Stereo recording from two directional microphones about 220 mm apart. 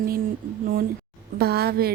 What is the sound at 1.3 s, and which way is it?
Speech, 45° right (ahead or behind).